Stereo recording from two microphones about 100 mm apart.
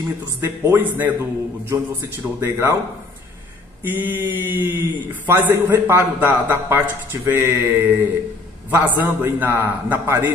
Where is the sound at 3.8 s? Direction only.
20° right (ahead or behind).